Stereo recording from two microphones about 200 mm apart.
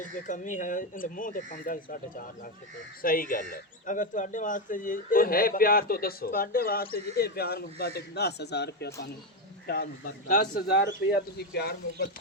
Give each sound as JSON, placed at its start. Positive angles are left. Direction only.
{"t": 0.0, "sound": "speech", "side_deg": 40}